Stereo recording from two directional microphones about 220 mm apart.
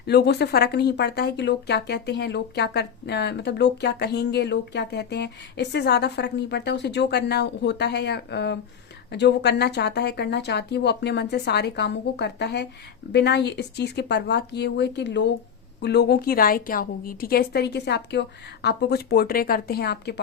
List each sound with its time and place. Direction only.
0.0 s speech: 50° left (ahead or behind)